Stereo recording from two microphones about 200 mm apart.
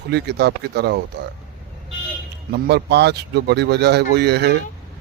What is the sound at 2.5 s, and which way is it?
Speech, 55° right (ahead or behind).